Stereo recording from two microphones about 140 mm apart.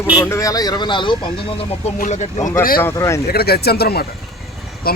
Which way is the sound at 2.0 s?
60° left (ahead or behind).